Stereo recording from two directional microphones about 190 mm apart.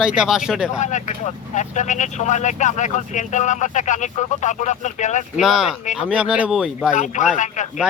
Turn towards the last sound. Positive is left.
turn(degrees=40)  # may be behind; listen again after turning